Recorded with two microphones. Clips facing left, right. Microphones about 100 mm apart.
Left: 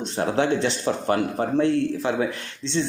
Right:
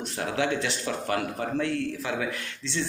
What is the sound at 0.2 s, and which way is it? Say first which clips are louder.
Speech: left 6 dB; 30° left (ahead or behind).